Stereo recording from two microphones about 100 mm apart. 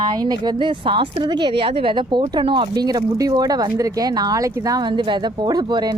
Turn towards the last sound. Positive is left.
turn(degrees=-45)  # may be behind; listen again after turning